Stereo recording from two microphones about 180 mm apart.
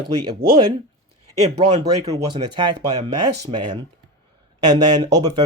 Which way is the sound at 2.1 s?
25° right (ahead or behind).